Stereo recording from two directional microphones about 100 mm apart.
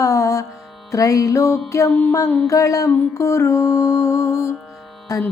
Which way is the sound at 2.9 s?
30° left (ahead or behind).